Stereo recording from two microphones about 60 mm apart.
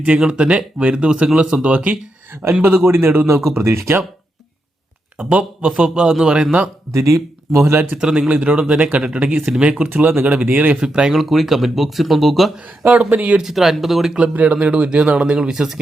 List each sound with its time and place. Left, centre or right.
0.2 s a man's voice: centre
2.6 s speech: right
5.1 s a man's voice: right
6.9 s speech: right
7.7 s speech: right
7.9 s a man's voice: centre
9.9 s speech: right
10.8 s a man's voice: centre
11.1 s speech: centre
12.8 s speech: right
13.4 s speech: centre
14.2 s a man's voice: right